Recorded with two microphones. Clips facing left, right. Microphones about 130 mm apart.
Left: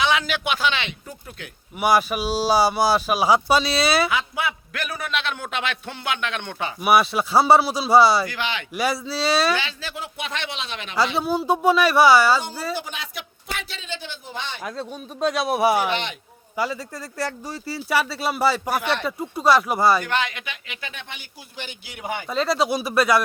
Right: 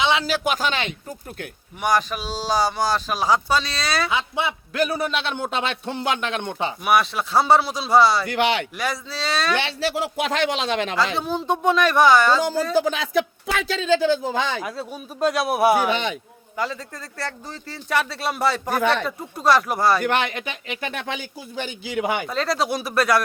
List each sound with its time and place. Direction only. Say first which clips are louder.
0.0 s a man's voice: right 1 dB; 25° right (ahead or behind); by 0.9 s 45° right (ahead or behind)
1.8 s speech: left 2 dB; 10° left (ahead or behind)
4.1 s a man's voice: right 1 dB; 25° right (ahead or behind)
6.8 s speech: left 2 dB; 5° left (ahead or behind)
8.3 s speech: right 8 dB; 70° right (ahead or behind)
8.7 s speech: left 3 dB; 5° left (ahead or behind)
9.6 s speech: right 7 dB; 75° right (ahead or behind); by 10.9 s 90° right
10.9 s speech: left 1 dB; 5° left (ahead or behind)
12.9 s speech: right 13 dB; 90° right
14.6 s speech: right 1 dB; 5° right (ahead or behind)
20.2 s a man's voice: right 4 dB; 40° right (ahead or behind)
21.9 s speech: right 7 dB; 85° right
22.3 s speech: left 1 dB; centre (ahead or behind)